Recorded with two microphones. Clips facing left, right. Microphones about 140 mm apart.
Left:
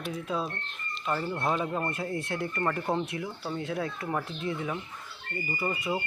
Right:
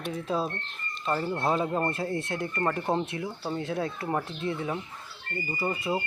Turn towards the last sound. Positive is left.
turn(degrees=-25)  # may be behind; listen again after turning